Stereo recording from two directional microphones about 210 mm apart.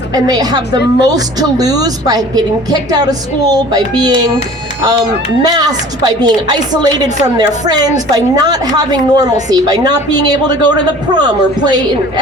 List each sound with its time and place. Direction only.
0.1 s a woman's voice: 20° right (ahead or behind)